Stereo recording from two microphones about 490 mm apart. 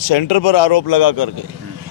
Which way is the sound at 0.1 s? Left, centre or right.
Left.